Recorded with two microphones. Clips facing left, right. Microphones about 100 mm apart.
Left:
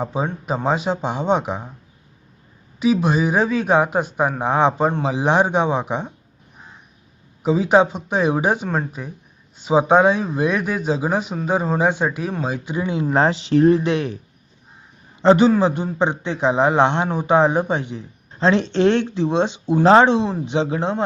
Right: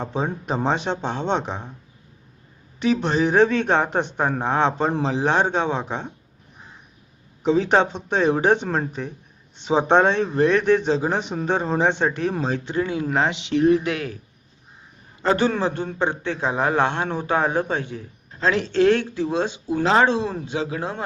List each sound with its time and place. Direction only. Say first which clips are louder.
0.0 s speech: left 2 dB; 10° left (ahead or behind)
2.7 s speech: left 3 dB; 5° left (ahead or behind)
7.4 s speech: left 3 dB; 10° left (ahead or behind)
13.1 s speech: left 5 dB; 35° left (ahead or behind)
15.2 s speech: left 7 dB; 20° left (ahead or behind)